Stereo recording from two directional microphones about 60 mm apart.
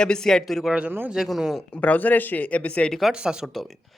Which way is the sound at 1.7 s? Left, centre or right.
Left.